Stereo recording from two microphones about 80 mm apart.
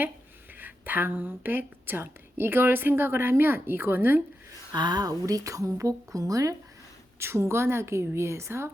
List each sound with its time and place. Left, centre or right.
0.6 s a woman's voice: right
4.7 s a woman's voice: right
7.2 s a woman's voice: right